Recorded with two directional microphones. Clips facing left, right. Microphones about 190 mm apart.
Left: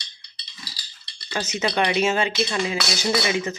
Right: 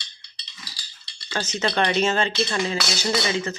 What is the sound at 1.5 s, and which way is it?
Speech, 10° left (ahead or behind).